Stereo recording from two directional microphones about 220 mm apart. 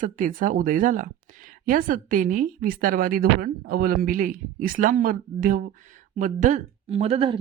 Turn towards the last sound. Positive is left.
turn(degrees=-25)  # may be behind; listen again after turning